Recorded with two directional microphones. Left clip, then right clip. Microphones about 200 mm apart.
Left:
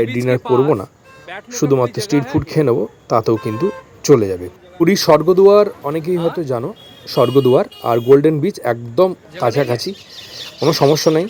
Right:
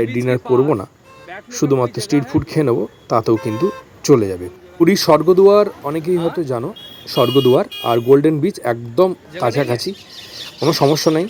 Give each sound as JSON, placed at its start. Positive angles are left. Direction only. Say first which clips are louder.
{"t": 0.2, "sound": "speech", "louder": "left 1 dB", "side_deg": 0}
{"t": 0.4, "sound": "speech", "louder": "even", "side_deg": 15}
{"t": 1.5, "sound": "speech", "louder": "left 1 dB", "side_deg": 0}